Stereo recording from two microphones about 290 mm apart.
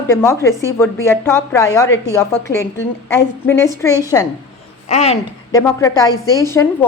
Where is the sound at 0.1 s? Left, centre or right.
Centre.